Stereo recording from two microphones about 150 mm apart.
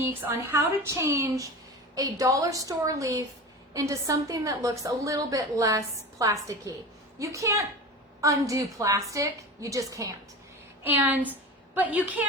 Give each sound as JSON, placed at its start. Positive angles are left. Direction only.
{"t": 0.0, "sound": "a woman's voice", "side_deg": -15}
{"t": 10.8, "sound": "a woman's voice", "side_deg": -10}